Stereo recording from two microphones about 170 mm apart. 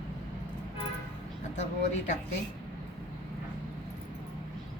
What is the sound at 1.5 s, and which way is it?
Speech, 40° left (ahead or behind).